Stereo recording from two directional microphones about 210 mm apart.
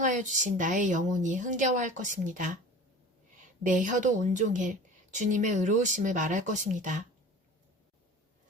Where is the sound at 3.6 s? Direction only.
35° right (ahead or behind).